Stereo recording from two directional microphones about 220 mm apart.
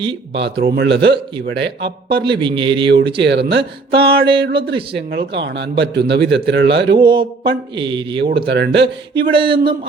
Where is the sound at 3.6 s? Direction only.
25° right (ahead or behind).